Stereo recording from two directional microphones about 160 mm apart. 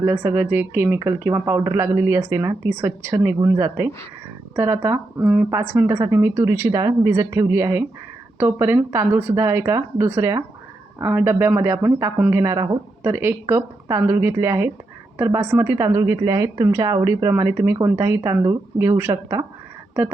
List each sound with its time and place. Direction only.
0.0 s a woman's voice: 10° right (ahead or behind)